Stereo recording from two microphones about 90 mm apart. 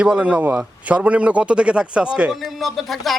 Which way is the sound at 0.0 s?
15° right (ahead or behind).